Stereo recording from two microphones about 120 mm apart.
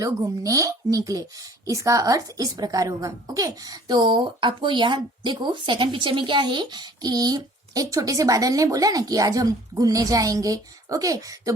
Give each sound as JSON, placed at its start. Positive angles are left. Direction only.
{"t": 0.0, "sound": "a woman's voice", "side_deg": -30}
{"t": 4.0, "sound": "a woman's voice", "side_deg": -45}